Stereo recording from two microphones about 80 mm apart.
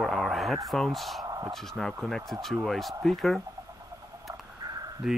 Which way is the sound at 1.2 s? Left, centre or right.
Right.